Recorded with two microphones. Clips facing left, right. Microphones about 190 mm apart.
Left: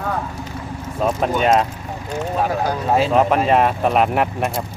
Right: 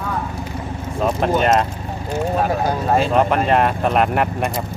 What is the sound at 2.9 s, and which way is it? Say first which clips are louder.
Speech: left 1 dB; centre (ahead or behind).